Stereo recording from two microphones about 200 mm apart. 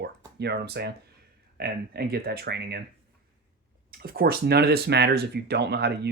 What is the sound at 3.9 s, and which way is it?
Speech, 50° right (ahead or behind).